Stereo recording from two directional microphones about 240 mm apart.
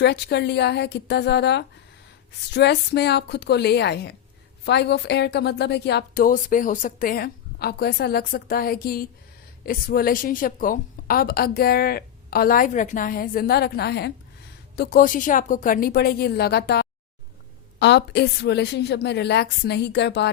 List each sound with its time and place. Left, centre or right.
0.0 s a woman's voice: left